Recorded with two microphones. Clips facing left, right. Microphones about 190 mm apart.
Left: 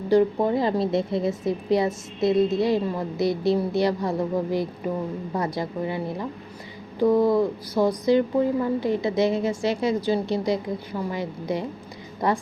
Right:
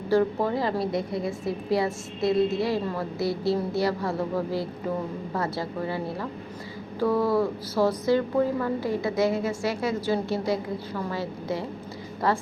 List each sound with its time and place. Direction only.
0.1 s a woman's voice: 20° left (ahead or behind)